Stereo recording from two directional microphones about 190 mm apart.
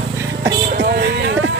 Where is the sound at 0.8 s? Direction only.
65° right (ahead or behind).